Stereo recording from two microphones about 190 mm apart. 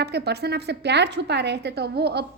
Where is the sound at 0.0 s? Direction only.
60° right (ahead or behind).